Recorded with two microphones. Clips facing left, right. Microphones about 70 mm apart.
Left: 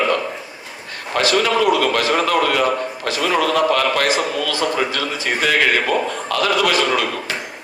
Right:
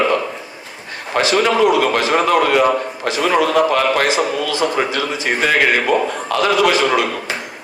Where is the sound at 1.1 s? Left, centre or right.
Right.